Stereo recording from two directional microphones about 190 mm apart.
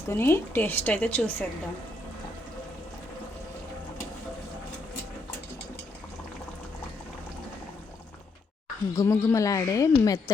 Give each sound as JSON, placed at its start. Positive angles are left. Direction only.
{"t": 0.1, "sound": "a woman's voice", "side_deg": 10}
{"t": 9.0, "sound": "a woman's voice", "side_deg": 15}